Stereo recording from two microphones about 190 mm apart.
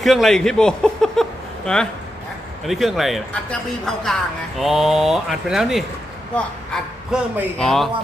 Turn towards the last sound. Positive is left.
turn(degrees=0)  # may be behind; listen again after turning